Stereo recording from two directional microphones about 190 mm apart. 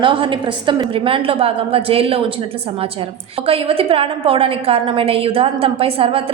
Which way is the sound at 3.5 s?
30° right (ahead or behind).